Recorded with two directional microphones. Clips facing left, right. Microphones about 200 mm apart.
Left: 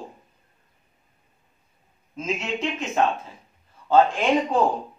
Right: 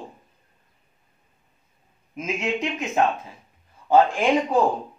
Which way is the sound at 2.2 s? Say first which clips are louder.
Right 1 dB; 15° right (ahead or behind).